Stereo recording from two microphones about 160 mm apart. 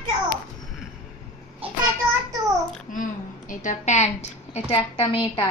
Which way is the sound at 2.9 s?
55° left (ahead or behind).